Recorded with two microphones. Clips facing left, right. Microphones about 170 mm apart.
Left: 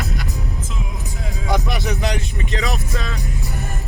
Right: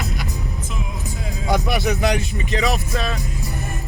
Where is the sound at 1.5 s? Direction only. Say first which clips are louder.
Right 2 dB; 10° right (ahead or behind).